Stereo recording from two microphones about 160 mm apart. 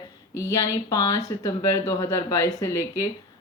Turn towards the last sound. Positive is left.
turn(degrees=20)  # may be behind; listen again after turning